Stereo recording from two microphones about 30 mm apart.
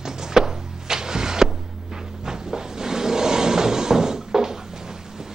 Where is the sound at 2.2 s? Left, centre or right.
Centre.